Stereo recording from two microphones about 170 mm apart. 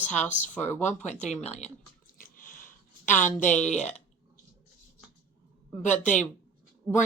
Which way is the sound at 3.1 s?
45° left (ahead or behind).